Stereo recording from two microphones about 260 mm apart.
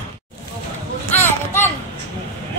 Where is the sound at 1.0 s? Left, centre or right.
Centre.